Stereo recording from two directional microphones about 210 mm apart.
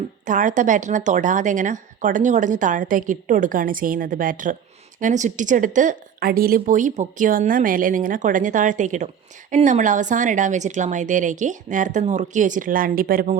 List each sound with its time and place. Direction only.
0.3 s a woman's voice: 40° right (ahead or behind)